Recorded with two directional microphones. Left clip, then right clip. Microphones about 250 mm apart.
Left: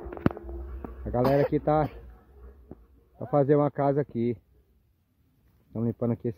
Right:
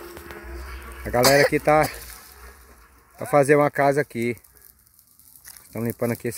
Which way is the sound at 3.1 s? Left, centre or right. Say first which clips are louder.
Right 6 dB; centre.